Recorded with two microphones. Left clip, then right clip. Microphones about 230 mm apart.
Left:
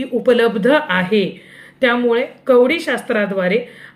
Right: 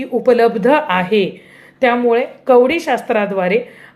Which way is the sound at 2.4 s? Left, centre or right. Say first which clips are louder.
Right 2 dB; centre.